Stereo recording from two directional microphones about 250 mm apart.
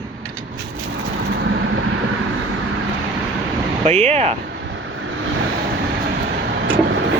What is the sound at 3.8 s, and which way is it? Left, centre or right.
Speech, right.